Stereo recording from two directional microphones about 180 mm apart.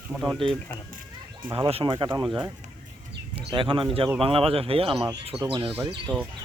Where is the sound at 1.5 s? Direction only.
30° right (ahead or behind).